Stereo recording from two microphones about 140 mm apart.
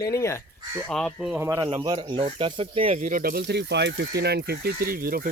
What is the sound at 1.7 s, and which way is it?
Speech, 30° right (ahead or behind).